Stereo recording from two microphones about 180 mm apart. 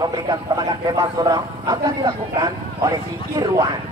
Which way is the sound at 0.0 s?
20° right (ahead or behind).